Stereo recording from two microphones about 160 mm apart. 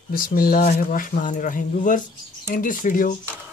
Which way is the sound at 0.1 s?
65° left (ahead or behind).